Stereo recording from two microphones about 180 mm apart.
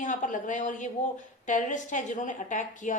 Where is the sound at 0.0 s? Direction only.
45° left (ahead or behind).